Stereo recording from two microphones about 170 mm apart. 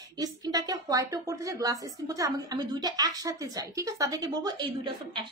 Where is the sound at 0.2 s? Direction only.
20° right (ahead or behind).